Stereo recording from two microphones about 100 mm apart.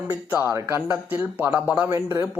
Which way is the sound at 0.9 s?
15° right (ahead or behind).